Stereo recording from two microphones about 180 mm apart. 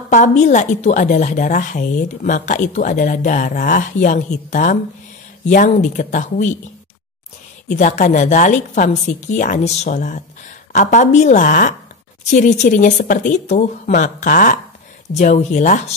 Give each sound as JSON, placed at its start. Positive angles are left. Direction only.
{"t": 0.1, "sound": "a woman's voice", "side_deg": 45}
{"t": 7.6, "sound": "a woman's voice", "side_deg": 40}